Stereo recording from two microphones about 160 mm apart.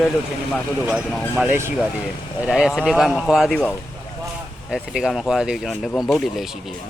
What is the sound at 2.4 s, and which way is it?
Speech, centre (ahead or behind).